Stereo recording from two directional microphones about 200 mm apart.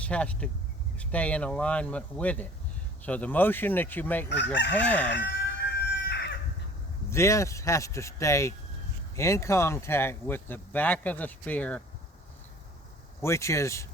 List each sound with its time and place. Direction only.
0.0 s speech: 5° left (ahead or behind)
5.1 s chicken: 60° left (ahead or behind)
7.1 s speech: 15° left (ahead or behind)
13.2 s speech: 15° left (ahead or behind)